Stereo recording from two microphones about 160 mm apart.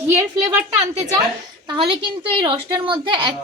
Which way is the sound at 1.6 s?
30° right (ahead or behind).